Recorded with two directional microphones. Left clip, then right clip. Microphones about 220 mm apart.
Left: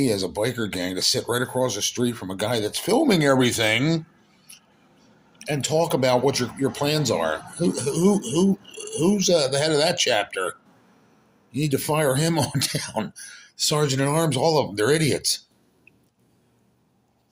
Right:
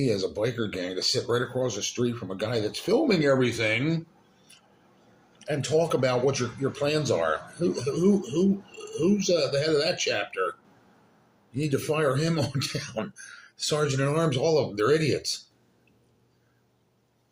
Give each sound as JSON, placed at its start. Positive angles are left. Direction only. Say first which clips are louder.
{"t": 0.0, "sound": "speech", "louder": "left 3 dB", "side_deg": 45}
{"t": 5.4, "sound": "speech", "louder": "left 2 dB", "side_deg": 45}
{"t": 11.5, "sound": "speech", "louder": "left 4 dB", "side_deg": 45}